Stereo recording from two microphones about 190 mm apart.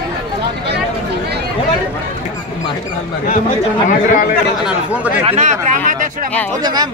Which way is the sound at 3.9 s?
45° left (ahead or behind).